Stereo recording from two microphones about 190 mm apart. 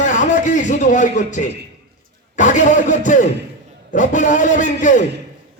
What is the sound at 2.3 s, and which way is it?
A man's voice, 40° left (ahead or behind).